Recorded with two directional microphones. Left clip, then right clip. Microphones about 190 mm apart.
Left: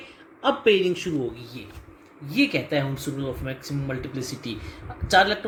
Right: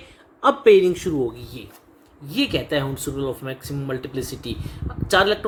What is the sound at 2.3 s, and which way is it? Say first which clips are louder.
Speech: right 1 dB; 55° right (ahead or behind).